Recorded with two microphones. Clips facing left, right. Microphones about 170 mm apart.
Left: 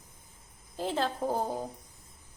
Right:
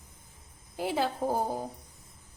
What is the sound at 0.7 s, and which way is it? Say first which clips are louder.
Speech: right 1 dB; 10° right (ahead or behind).